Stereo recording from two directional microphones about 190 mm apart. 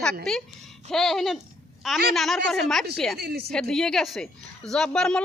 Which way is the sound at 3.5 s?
Centre (ahead or behind).